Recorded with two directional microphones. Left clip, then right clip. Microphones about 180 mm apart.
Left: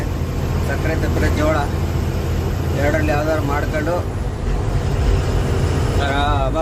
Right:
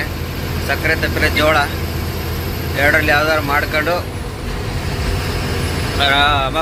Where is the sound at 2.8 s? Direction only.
Centre (ahead or behind).